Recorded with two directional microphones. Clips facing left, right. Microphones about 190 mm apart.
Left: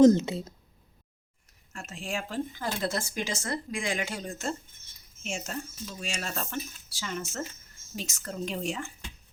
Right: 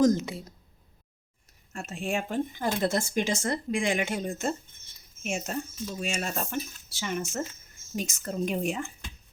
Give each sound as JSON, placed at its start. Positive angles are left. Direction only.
{"t": 0.0, "sound": "speech", "side_deg": 25}
{"t": 1.7, "sound": "speech", "side_deg": -25}